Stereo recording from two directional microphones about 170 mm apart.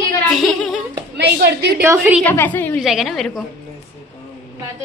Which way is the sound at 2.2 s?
10° left (ahead or behind).